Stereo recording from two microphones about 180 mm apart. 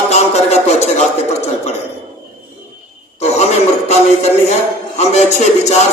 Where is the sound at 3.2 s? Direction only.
35° left (ahead or behind).